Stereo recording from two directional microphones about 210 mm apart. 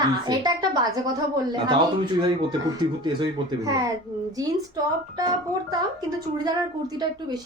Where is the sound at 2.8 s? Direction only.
20° right (ahead or behind).